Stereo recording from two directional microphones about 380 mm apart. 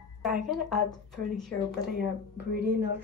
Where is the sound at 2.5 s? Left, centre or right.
Right.